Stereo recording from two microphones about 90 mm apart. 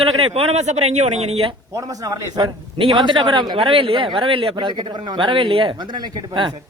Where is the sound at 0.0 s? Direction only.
90° right.